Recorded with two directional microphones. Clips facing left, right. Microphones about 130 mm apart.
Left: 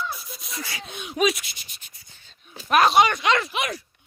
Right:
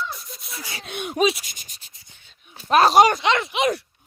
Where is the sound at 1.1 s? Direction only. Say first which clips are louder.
Right 2 dB; 30° right (ahead or behind).